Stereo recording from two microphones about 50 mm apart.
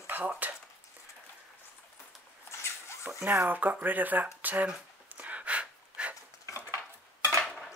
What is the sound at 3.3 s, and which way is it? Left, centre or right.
Speech, right.